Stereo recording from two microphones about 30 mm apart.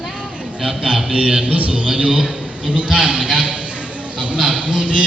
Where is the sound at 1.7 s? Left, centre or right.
Right.